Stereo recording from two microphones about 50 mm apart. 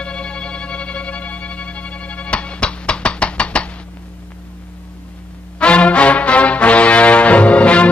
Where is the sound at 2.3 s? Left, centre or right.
Left.